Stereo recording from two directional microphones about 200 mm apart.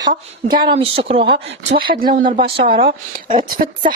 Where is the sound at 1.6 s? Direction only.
50° right (ahead or behind).